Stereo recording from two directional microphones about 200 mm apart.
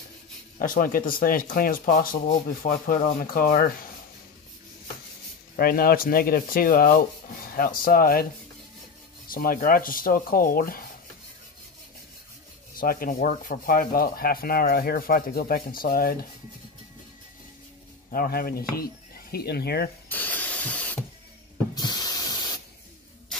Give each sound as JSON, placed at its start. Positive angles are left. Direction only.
{"t": 0.6, "sound": "speech", "side_deg": 45}
{"t": 5.6, "sound": "speech", "side_deg": 50}
{"t": 9.3, "sound": "speech", "side_deg": 45}
{"t": 12.7, "sound": "speech", "side_deg": 45}
{"t": 18.1, "sound": "speech", "side_deg": 45}
{"t": 20.1, "sound": "spray", "side_deg": 10}
{"t": 21.7, "sound": "a sound", "side_deg": 20}